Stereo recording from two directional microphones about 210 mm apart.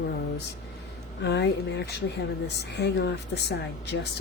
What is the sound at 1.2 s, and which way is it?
A woman's voice, 55° left (ahead or behind).